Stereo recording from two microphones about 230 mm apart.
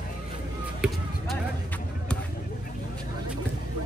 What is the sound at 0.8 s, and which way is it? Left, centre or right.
Basketball bounce, centre.